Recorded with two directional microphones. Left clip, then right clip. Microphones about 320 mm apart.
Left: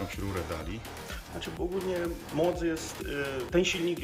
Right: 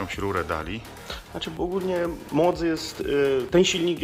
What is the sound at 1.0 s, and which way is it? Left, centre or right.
Music, centre.